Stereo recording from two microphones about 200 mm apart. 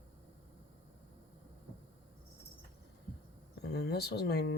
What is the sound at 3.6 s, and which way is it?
Speech, 55° left (ahead or behind).